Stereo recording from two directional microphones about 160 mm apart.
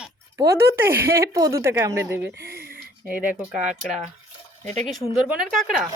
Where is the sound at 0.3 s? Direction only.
15° right (ahead or behind).